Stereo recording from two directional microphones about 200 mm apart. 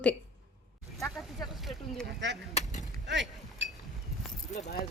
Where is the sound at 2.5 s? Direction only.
35° left (ahead or behind).